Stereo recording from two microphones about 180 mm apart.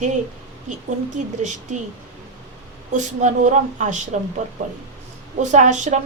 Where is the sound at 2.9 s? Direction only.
45° right (ahead or behind).